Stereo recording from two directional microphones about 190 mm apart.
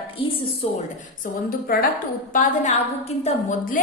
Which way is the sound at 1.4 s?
50° left (ahead or behind).